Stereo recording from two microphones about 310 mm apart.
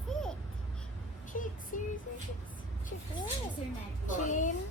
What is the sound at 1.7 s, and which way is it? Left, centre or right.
Speech, left.